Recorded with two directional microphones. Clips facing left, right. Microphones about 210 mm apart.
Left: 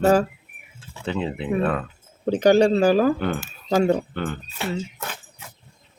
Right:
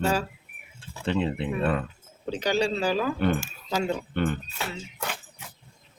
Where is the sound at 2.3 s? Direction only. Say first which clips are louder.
Left 10 dB; 50° left (ahead or behind).